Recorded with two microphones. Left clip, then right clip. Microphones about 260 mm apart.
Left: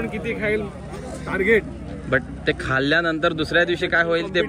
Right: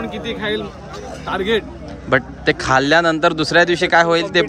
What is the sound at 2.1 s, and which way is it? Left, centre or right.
A man's voice, centre.